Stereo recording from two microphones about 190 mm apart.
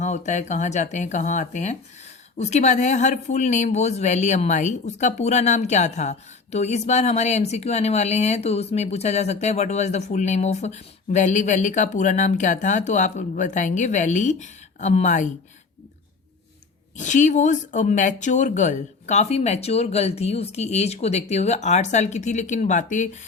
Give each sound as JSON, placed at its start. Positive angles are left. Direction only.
{"t": 0.0, "sound": "speech", "side_deg": 40}
{"t": 17.0, "sound": "speech", "side_deg": 40}